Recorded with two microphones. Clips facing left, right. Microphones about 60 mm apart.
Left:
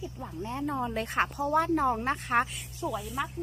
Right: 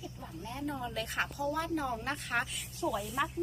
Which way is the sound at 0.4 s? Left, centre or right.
Left.